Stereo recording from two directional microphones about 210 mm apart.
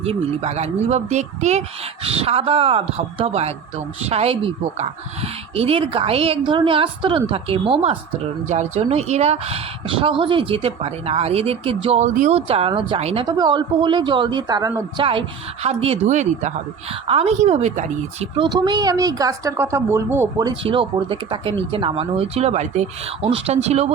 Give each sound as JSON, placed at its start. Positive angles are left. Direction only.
{"t": 0.0, "sound": "speech", "side_deg": -30}
{"t": 18.4, "sound": "speech", "side_deg": -20}
{"t": 20.7, "sound": "speech", "side_deg": -25}